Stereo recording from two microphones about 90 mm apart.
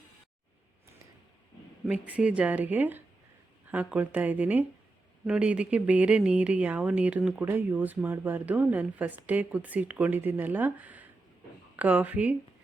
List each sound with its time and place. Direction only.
1.9 s speech: 15° right (ahead or behind)